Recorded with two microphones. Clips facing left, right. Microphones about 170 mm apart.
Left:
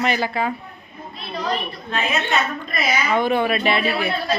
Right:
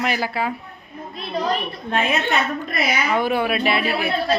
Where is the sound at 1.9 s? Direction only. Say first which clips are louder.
Right 3 dB; 55° right (ahead or behind).